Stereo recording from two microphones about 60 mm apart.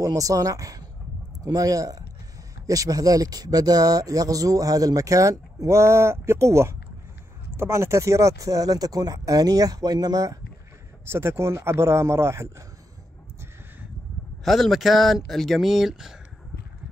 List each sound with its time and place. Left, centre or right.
0.0 s speech: right
1.4 s speech: right
5.7 s a man's voice: right
11.1 s a man's voice: right
14.4 s speech: centre